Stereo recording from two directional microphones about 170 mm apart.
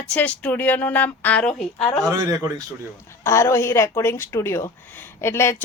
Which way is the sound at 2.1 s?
20° right (ahead or behind).